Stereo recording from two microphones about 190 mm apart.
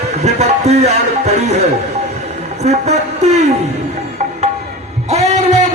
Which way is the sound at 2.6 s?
35° right (ahead or behind).